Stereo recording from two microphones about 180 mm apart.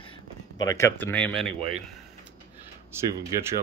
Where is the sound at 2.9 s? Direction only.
15° right (ahead or behind).